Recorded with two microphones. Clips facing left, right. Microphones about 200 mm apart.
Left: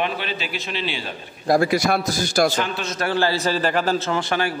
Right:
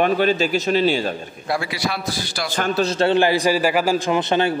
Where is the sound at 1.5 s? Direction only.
45° left (ahead or behind).